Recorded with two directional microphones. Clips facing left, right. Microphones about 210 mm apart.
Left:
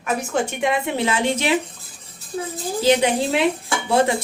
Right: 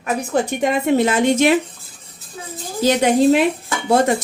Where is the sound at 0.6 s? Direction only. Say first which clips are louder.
Right 8 dB; 45° right (ahead or behind).